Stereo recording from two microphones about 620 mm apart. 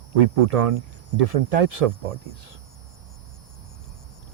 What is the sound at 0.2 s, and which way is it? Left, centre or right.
Speech, right.